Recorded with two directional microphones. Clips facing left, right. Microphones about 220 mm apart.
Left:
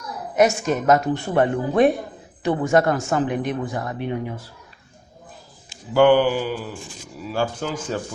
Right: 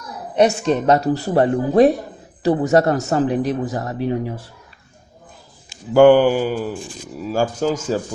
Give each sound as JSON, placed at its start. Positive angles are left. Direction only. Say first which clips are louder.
{"t": 0.3, "sound": "a man's voice", "louder": "right 3 dB", "side_deg": -30}
{"t": 5.9, "sound": "a man's voice", "louder": "right 5 dB", "side_deg": -45}